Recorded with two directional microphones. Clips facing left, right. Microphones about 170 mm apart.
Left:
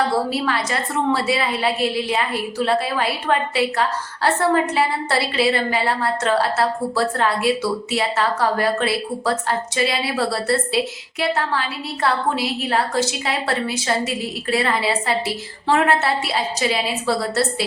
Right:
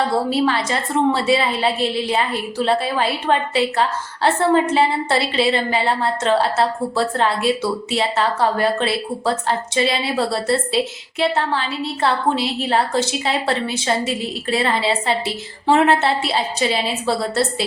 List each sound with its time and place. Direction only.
0.3 s a woman's voice: 25° right (ahead or behind)